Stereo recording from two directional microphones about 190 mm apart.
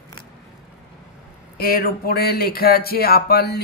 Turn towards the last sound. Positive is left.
turn(degrees=55)  # may be behind; listen again after turning